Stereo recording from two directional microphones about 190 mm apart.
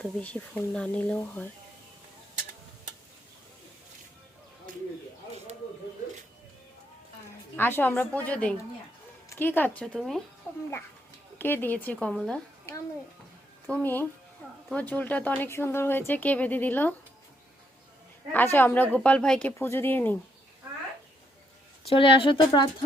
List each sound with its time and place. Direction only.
0.0 s speech: 5° left (ahead or behind)
7.5 s a woman's voice: 10° left (ahead or behind)
18.3 s speech: 10° left (ahead or behind)
21.8 s speech: 25° left (ahead or behind)